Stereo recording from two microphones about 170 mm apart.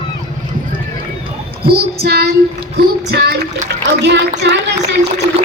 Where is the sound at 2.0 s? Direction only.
70° right (ahead or behind).